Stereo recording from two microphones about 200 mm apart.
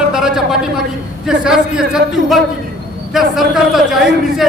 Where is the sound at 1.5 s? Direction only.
5° right (ahead or behind).